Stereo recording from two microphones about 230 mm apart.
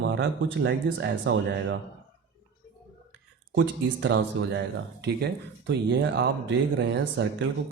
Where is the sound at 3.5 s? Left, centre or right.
Right.